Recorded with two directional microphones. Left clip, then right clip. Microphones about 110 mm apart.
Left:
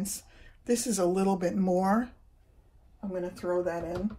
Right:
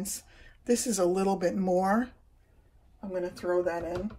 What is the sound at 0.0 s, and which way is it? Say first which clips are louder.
Speech: even; 25° left (ahead or behind).